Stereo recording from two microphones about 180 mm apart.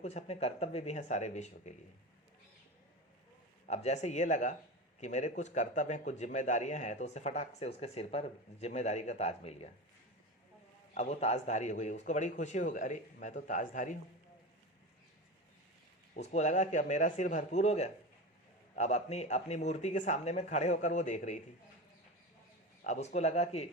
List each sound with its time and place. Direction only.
0.0 s speech: 40° left (ahead or behind)
3.7 s speech: 40° left (ahead or behind)
10.9 s a man's voice: 40° left (ahead or behind)
16.1 s speech: 40° left (ahead or behind)
22.8 s speech: 40° left (ahead or behind)